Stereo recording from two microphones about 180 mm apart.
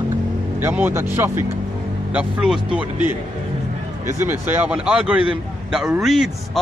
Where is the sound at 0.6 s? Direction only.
10° right (ahead or behind).